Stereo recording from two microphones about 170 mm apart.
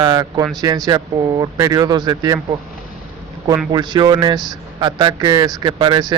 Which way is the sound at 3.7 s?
25° right (ahead or behind).